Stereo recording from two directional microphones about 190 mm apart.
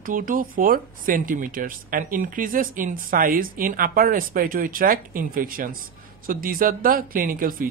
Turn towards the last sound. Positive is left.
turn(degrees=-45)  # may be behind; listen again after turning